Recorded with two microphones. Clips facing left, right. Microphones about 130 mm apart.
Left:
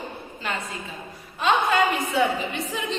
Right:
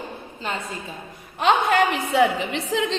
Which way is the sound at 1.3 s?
65° right (ahead or behind).